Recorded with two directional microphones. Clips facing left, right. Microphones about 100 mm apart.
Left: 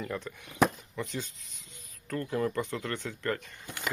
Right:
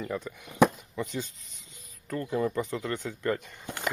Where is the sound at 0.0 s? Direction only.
5° right (ahead or behind).